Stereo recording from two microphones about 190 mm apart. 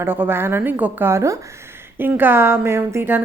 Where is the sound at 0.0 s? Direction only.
10° right (ahead or behind).